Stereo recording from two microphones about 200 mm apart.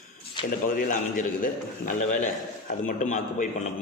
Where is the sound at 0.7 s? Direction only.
40° left (ahead or behind).